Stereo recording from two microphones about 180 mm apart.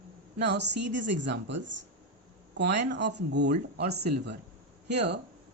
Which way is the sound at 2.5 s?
75° right (ahead or behind).